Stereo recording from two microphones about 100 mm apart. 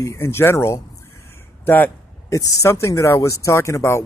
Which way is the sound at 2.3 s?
35° left (ahead or behind).